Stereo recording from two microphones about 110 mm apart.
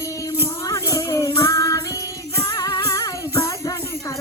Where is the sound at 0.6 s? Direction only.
25° left (ahead or behind).